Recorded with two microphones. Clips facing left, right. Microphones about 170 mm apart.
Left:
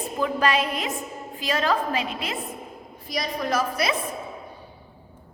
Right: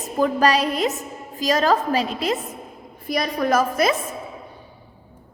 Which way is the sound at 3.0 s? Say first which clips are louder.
Right 6 dB; 50° right (ahead or behind).